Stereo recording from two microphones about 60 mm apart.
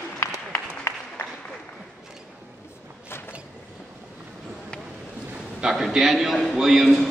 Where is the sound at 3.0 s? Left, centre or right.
Left.